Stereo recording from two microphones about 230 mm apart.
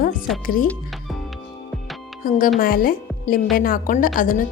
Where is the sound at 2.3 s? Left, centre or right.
Left.